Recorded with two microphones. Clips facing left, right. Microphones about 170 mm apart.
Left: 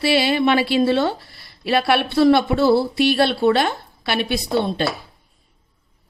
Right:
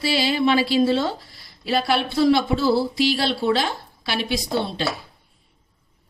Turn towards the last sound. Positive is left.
turn(degrees=55)  # may be behind; listen again after turning